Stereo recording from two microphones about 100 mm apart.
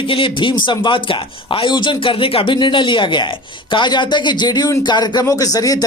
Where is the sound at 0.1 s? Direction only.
55° left (ahead or behind).